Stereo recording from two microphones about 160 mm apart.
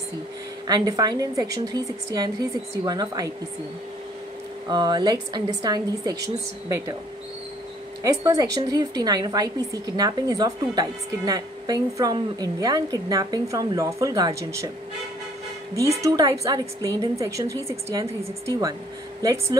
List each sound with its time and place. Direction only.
0.7 s a woman's voice: 25° right (ahead or behind)
4.6 s a woman's voice: 25° right (ahead or behind)
8.0 s a woman's voice: 20° right (ahead or behind)
15.7 s a woman's voice: 20° right (ahead or behind)